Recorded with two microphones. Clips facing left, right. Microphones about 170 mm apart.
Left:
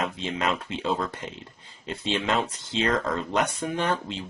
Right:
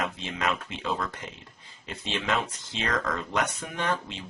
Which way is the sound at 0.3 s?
30° left (ahead or behind).